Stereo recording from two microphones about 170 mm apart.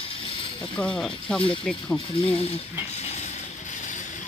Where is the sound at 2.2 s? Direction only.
30° left (ahead or behind).